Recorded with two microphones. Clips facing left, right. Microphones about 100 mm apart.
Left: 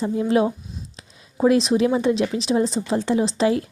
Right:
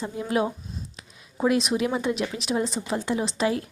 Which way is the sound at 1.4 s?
25° left (ahead or behind).